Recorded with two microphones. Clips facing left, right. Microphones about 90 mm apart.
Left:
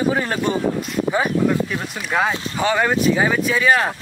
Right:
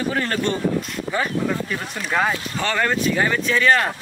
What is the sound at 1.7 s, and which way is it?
Speech, 5° left (ahead or behind).